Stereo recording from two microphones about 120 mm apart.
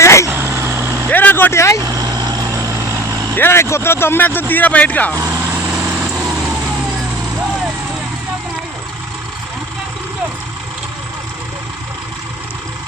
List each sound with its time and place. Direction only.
0.0 s vehicle: 25° left (ahead or behind)
0.3 s vehicle: 20° right (ahead or behind)
1.1 s speech: 15° left (ahead or behind)
1.8 s vehicle: 30° right (ahead or behind)
3.3 s speech: 20° left (ahead or behind)
5.1 s vehicle: 25° right (ahead or behind)